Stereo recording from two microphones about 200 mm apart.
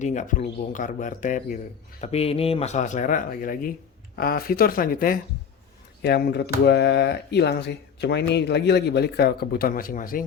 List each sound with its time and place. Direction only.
0.0 s speech: 40° left (ahead or behind)